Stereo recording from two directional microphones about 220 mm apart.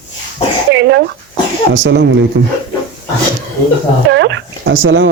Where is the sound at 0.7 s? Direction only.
55° right (ahead or behind).